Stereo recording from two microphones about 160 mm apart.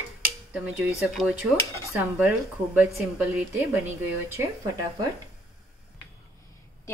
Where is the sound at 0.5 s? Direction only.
5° right (ahead or behind).